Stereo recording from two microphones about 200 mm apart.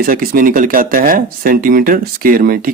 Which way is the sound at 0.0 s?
45° right (ahead or behind).